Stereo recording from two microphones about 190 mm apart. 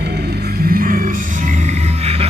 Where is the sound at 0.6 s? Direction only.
50° right (ahead or behind).